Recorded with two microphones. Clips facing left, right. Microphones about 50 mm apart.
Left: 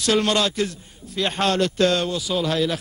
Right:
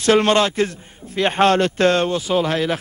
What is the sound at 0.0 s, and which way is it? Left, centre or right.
A man's voice, right.